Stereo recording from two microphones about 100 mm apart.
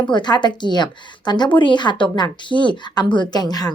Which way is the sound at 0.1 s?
50° left (ahead or behind).